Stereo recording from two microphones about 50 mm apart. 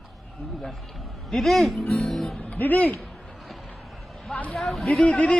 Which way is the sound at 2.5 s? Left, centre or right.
Left.